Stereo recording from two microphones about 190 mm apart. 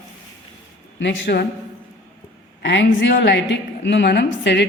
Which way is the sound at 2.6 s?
70° left (ahead or behind).